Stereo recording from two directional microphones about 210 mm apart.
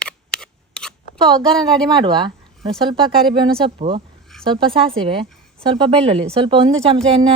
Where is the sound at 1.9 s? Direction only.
20° right (ahead or behind).